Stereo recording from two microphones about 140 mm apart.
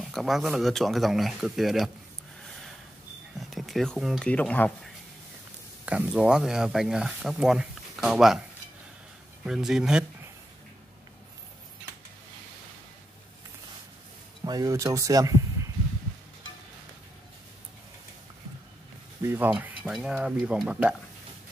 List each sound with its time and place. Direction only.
0.0 s speech: centre (ahead or behind)
3.3 s a sound: centre (ahead or behind)
4.3 s speech: 10° left (ahead or behind)
5.9 s speech: 5° right (ahead or behind)
9.4 s speech: 5° right (ahead or behind)
14.4 s speech: 25° right (ahead or behind)
19.2 s speech: 15° right (ahead or behind)